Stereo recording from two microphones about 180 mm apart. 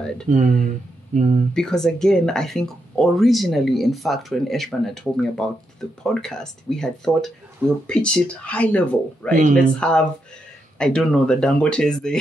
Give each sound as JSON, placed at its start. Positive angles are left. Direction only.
{"t": 0.3, "sound": "speech", "side_deg": -45}
{"t": 1.5, "sound": "speech", "side_deg": 5}